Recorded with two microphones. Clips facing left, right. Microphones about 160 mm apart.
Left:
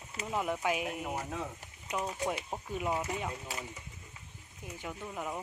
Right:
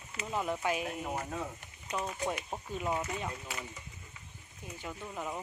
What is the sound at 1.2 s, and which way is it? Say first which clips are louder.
Speech: even; centre (ahead or behind).